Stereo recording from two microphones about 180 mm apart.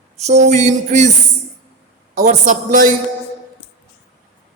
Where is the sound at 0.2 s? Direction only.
40° right (ahead or behind).